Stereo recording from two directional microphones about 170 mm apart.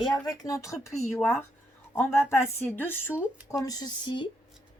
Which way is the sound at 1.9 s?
15° left (ahead or behind).